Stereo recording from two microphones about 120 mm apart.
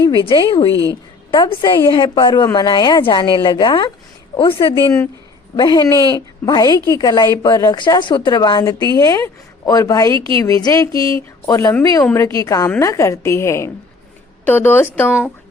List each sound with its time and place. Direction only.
0.0 s speech: 40° left (ahead or behind)
0.7 s a woman's voice: 30° right (ahead or behind)
1.3 s a woman's voice: 40° left (ahead or behind); by 15.1 s 15° left (ahead or behind)